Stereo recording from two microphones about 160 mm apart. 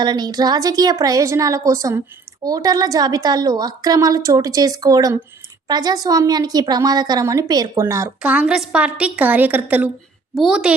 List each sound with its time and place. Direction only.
0.0 s a woman's voice: 25° right (ahead or behind)
8.2 s a woman's voice: 10° right (ahead or behind)